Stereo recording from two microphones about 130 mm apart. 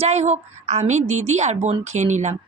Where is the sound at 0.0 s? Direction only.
55° right (ahead or behind).